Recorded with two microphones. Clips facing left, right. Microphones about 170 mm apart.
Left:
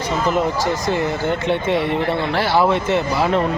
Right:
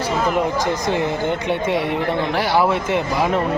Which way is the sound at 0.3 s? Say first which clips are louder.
Even; 20° right (ahead or behind).